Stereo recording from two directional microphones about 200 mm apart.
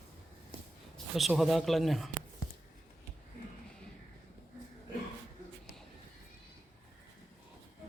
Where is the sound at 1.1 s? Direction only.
Centre (ahead or behind).